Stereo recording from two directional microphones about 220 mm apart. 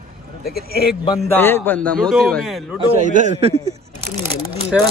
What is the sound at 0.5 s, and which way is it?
Speech, 45° left (ahead or behind).